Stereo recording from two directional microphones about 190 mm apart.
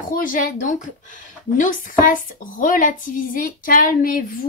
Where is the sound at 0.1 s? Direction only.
45° left (ahead or behind).